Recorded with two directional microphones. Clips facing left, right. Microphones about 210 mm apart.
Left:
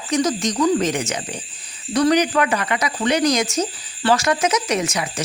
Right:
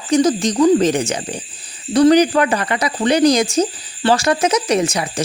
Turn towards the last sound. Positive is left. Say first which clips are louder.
# right 5 dB
turn(degrees=-30)  # may be behind; listen again after turning